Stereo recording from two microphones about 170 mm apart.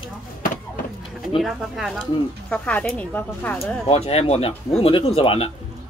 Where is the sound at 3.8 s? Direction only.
35° left (ahead or behind).